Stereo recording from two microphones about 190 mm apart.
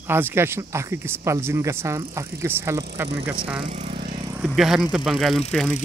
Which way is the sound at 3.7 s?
40° right (ahead or behind).